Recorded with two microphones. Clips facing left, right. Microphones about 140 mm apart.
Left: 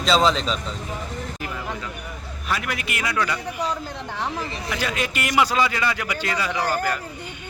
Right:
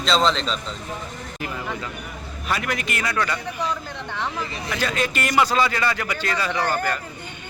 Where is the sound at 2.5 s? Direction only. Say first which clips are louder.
Right 1 dB; 5° left (ahead or behind).